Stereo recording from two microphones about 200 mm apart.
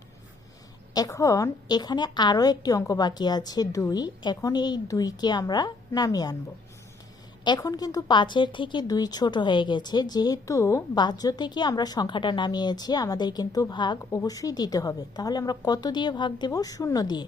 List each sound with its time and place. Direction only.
0.9 s a woman's voice: 15° left (ahead or behind)
7.4 s a woman's voice: 20° left (ahead or behind)